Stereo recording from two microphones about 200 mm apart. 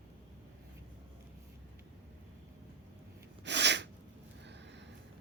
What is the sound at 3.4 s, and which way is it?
Sneeze, 60° right (ahead or behind).